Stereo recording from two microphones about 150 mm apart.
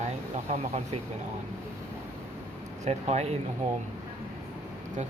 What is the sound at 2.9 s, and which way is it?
Speech, 45° right (ahead or behind).